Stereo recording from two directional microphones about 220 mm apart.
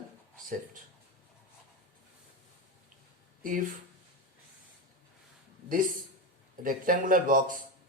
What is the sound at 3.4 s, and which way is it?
Speech, 40° right (ahead or behind).